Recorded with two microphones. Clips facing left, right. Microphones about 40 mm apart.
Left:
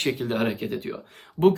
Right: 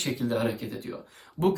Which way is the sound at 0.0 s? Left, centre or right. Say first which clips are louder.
Left 3 dB; left.